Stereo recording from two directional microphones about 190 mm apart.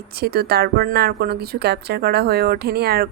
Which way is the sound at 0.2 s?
55° right (ahead or behind).